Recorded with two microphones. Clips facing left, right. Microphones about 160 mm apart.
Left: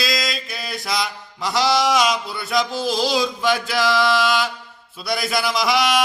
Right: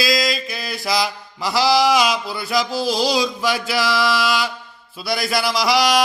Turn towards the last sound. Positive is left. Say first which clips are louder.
# right 2 dB
turn(degrees=0)  # may be behind; listen again after turning